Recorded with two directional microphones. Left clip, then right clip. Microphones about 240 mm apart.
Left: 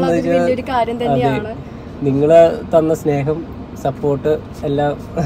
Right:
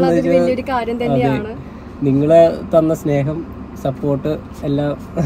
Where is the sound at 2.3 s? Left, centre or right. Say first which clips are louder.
Left 1 dB; centre.